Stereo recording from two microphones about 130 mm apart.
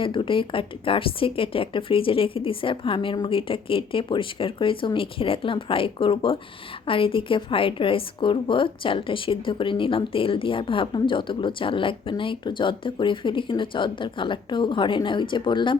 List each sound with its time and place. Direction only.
0.0 s a woman's voice: 40° left (ahead or behind)